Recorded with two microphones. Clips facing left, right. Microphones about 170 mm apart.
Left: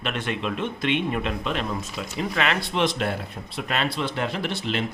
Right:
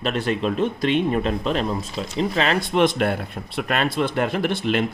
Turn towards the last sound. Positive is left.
turn(degrees=-55)  # may be behind; listen again after turning